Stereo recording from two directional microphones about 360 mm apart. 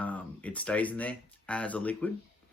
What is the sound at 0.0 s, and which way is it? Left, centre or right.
Speech, centre.